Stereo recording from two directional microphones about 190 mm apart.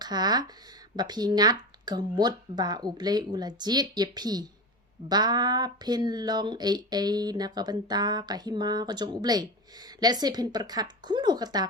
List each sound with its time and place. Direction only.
0.0 s speech: 20° right (ahead or behind)